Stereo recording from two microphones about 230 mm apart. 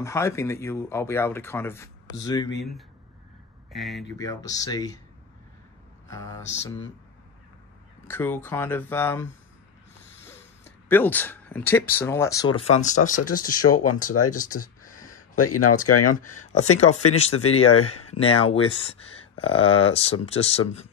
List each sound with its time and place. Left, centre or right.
0.0 s speech: centre
3.7 s speech: centre
4.2 s speech: centre
6.0 s a sound: centre
8.1 s speech: centre
10.9 s speech: centre; by 14.1 s left
14.9 s a sound: left
15.9 s speech: left
16.7 s speech: left
17.4 s speech: left
18.1 s speech: left